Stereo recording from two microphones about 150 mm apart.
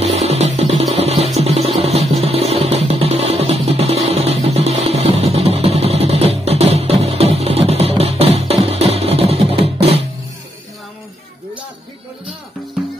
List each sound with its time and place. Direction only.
0.0 s music: 45° right (ahead or behind)